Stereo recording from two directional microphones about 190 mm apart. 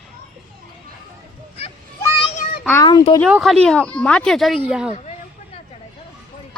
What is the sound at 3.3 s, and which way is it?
Speech, centre (ahead or behind).